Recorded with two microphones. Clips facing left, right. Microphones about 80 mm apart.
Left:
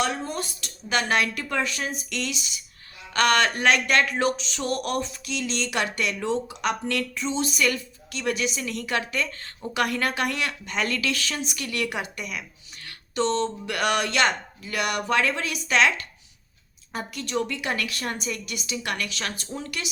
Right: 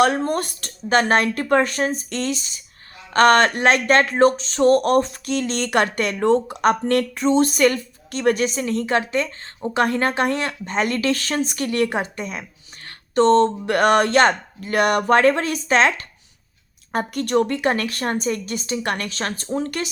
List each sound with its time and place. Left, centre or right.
0.0 s speech: right
16.9 s speech: right